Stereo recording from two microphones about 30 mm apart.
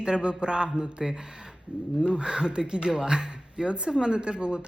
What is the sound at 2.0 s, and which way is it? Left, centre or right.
Speech, right.